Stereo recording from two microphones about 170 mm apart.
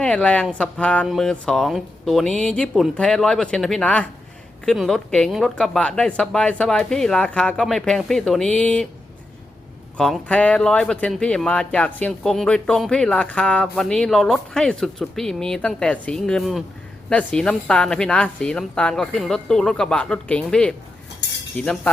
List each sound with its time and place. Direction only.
0.0 s speech: 5° left (ahead or behind)
10.0 s speech: 5° left (ahead or behind)
21.5 s cutlery: 5° left (ahead or behind)